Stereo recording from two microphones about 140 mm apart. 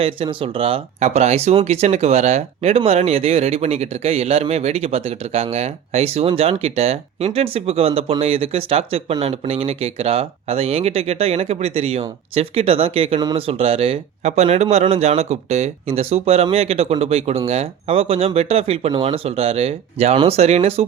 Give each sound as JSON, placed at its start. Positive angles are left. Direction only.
{"t": 0.0, "sound": "speech", "side_deg": -40}
{"t": 13.1, "sound": "speech", "side_deg": -30}
{"t": 13.5, "sound": "speech", "side_deg": -45}